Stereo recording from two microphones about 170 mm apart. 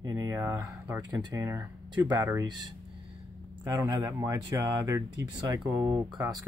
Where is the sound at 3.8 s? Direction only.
20° right (ahead or behind).